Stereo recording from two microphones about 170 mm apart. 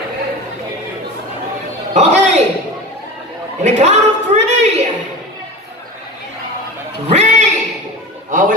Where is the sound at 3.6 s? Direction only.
45° right (ahead or behind).